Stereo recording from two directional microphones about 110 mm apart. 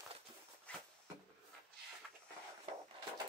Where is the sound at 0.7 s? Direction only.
10° left (ahead or behind).